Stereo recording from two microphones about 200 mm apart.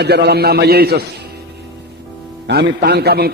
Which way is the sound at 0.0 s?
55° right (ahead or behind).